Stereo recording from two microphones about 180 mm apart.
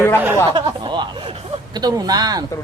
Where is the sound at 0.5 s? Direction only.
25° right (ahead or behind).